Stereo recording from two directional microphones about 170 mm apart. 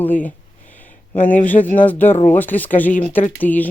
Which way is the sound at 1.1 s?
10° left (ahead or behind).